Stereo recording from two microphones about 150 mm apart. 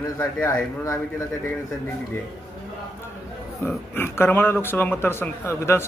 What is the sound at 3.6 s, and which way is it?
A man's voice, 15° left (ahead or behind).